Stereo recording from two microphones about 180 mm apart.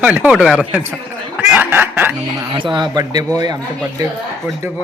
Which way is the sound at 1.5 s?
10° right (ahead or behind).